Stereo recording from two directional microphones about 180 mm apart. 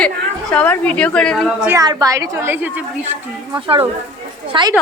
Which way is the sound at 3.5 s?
30° right (ahead or behind).